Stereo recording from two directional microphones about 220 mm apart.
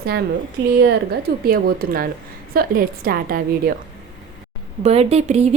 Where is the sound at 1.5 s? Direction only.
40° right (ahead or behind).